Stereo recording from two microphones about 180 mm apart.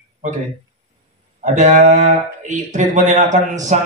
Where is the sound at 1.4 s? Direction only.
40° right (ahead or behind).